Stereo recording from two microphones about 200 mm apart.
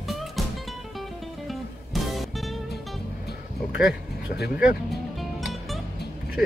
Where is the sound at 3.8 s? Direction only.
55° left (ahead or behind).